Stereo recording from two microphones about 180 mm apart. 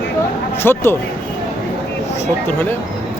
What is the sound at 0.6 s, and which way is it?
Speech, 10° left (ahead or behind).